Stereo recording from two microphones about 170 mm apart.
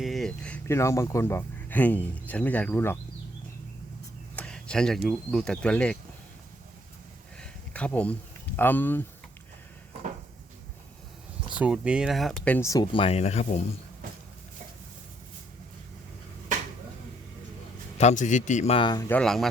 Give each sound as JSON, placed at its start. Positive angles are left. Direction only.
{"t": 0.0, "sound": "speech", "side_deg": 0}
{"t": 4.4, "sound": "a sound", "side_deg": 5}
{"t": 5.0, "sound": "speech", "side_deg": 0}
{"t": 7.3, "sound": "a sound", "side_deg": 5}
{"t": 8.5, "sound": "speech", "side_deg": 10}
{"t": 11.5, "sound": "speech", "side_deg": -5}
{"t": 12.5, "sound": "a man's voice", "side_deg": 20}
{"t": 17.9, "sound": "a man's voice", "side_deg": 45}
{"t": 19.0, "sound": "speech", "side_deg": 5}